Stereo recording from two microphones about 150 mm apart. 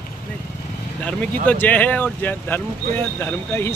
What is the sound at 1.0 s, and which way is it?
Speech, 10° left (ahead or behind).